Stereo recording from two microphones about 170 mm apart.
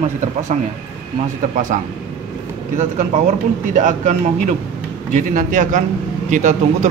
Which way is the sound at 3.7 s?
45° right (ahead or behind).